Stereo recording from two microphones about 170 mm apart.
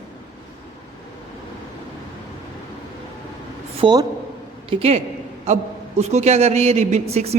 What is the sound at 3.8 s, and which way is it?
Speech, 30° right (ahead or behind).